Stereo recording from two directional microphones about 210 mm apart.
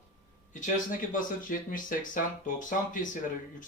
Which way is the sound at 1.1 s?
40° left (ahead or behind).